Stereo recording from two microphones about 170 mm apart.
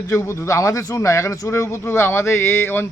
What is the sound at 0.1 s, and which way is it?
A man's voice, 15° left (ahead or behind).